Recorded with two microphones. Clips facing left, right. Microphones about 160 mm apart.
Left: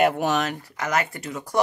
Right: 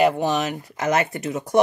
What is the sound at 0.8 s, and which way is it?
Speech, 20° right (ahead or behind).